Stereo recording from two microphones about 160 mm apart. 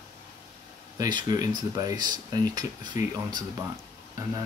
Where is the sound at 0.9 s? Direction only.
25° right (ahead or behind).